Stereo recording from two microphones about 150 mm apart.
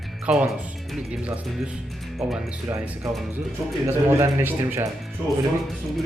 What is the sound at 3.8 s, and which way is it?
A man's voice, 20° right (ahead or behind).